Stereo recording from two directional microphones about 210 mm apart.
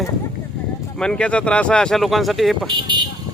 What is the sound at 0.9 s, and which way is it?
Speech, 5° left (ahead or behind).